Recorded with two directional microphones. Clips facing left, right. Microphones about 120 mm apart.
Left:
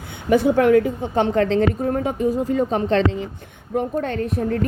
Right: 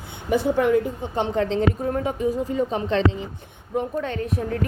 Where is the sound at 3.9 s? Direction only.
45° left (ahead or behind).